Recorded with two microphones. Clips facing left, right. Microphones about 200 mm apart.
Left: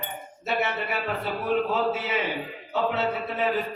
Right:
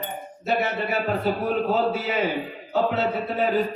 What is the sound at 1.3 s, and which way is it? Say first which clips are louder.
Speech: even; 40° right (ahead or behind).